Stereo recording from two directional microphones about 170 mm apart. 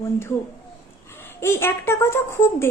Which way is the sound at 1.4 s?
15° left (ahead or behind).